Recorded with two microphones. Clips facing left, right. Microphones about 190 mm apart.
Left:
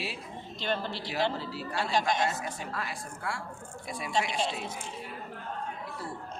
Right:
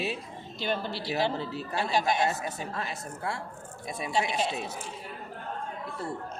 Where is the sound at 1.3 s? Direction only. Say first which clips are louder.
Right 2 dB; 20° right (ahead or behind).